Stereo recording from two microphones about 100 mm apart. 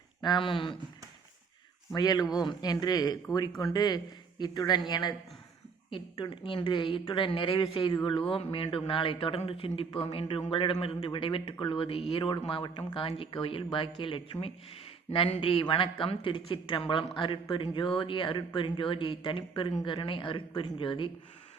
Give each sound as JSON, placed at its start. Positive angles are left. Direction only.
{"t": 0.2, "sound": "a man's voice", "side_deg": 50}
{"t": 2.0, "sound": "a man's voice", "side_deg": 40}
{"t": 7.9, "sound": "a man's voice", "side_deg": 55}